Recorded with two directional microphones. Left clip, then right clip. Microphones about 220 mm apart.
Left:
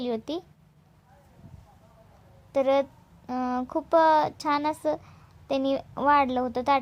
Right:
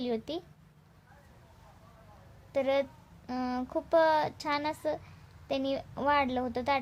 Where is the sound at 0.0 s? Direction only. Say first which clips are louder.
Left 4 dB; 25° left (ahead or behind).